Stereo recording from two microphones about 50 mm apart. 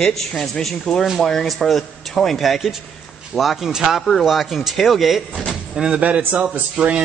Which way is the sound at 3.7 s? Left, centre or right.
Centre.